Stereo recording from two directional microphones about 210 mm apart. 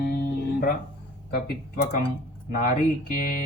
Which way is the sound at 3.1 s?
40° left (ahead or behind).